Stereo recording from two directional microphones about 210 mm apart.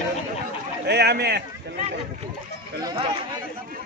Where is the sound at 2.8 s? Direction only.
20° right (ahead or behind).